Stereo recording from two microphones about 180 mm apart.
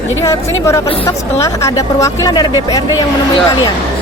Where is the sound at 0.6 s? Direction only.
15° left (ahead or behind).